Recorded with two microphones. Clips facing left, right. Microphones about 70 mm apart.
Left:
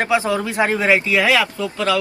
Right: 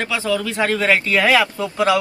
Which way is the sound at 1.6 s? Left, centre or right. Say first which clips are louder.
Right 2 dB; right.